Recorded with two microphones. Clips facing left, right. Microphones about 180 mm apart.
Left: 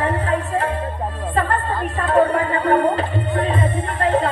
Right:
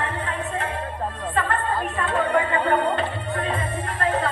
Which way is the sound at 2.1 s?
35° left (ahead or behind).